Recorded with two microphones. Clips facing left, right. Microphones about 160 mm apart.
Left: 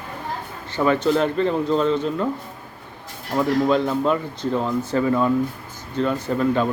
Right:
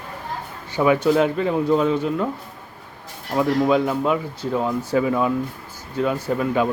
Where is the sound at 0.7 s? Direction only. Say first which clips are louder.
Right 1 dB; 10° right (ahead or behind).